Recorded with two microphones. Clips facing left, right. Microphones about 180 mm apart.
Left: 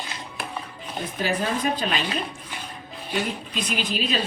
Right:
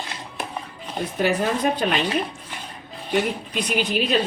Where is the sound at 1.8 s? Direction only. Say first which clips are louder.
Right 4 dB; 55° right (ahead or behind).